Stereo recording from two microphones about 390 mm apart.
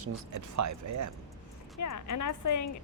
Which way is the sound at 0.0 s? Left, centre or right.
Right.